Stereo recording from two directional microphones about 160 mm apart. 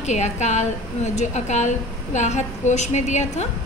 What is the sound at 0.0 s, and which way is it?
A woman's voice, 45° left (ahead or behind).